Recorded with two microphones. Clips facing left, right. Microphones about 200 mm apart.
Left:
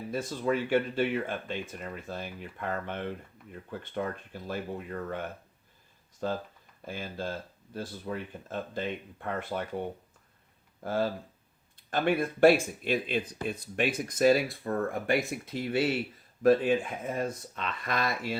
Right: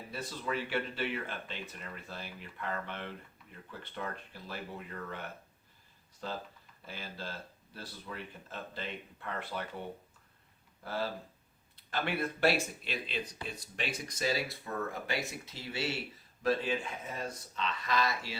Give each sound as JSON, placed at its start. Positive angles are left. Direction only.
{"t": 0.1, "sound": "speech", "side_deg": 50}
{"t": 6.2, "sound": "speech", "side_deg": 50}
{"t": 11.8, "sound": "speech", "side_deg": 50}